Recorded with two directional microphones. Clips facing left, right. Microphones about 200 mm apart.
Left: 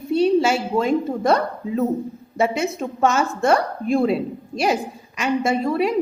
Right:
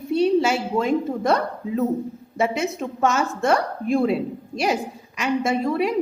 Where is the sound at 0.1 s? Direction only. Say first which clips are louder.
Left 2 dB; 35° left (ahead or behind).